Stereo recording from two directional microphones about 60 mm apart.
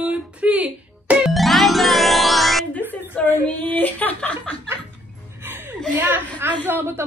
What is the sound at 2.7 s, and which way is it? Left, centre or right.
Speech, left.